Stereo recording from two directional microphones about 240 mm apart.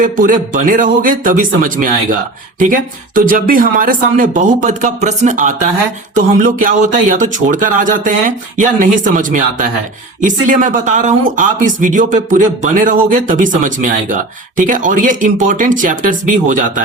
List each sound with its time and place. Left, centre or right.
0.0 s speech: right